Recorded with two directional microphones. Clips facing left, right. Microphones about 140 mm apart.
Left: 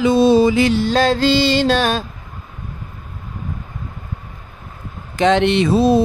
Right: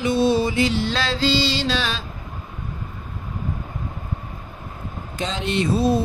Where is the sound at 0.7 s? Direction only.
45° left (ahead or behind).